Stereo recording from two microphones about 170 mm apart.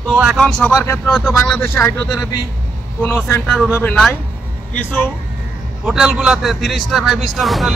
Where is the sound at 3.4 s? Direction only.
Centre (ahead or behind).